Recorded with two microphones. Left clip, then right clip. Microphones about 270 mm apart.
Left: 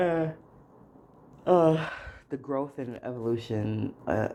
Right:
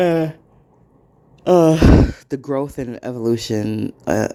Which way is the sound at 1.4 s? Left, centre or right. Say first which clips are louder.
Right 10 dB; right.